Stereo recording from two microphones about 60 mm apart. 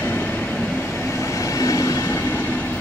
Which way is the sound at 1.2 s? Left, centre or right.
Left.